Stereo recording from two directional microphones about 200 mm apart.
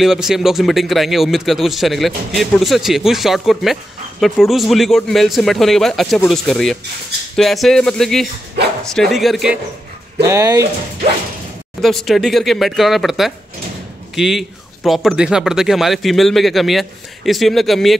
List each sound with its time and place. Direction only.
0.0 s speech: centre (ahead or behind)
10.2 s speech: 15° right (ahead or behind)
11.8 s speech: centre (ahead or behind)